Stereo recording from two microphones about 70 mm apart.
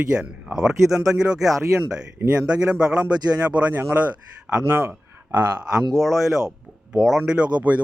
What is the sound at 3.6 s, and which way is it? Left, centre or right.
Speech, right.